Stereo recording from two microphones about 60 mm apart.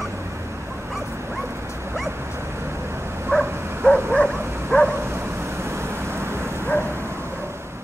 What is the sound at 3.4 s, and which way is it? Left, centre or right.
Dog, right.